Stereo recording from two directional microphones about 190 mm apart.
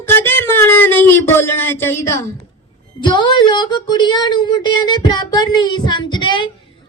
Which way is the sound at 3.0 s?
25° left (ahead or behind).